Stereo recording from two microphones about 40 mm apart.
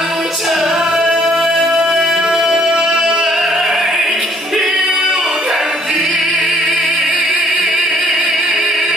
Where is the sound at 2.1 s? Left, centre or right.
Centre.